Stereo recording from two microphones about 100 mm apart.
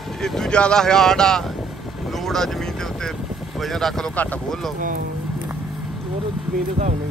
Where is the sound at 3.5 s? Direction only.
Centre (ahead or behind).